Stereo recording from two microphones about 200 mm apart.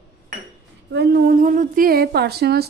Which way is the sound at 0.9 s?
55° right (ahead or behind).